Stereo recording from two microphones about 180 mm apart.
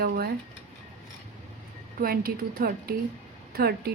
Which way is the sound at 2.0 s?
55° right (ahead or behind).